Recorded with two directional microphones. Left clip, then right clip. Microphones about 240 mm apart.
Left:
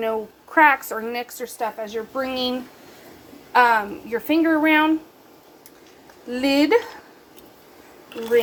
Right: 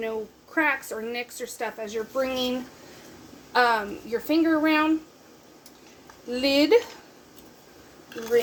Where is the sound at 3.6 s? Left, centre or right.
Left.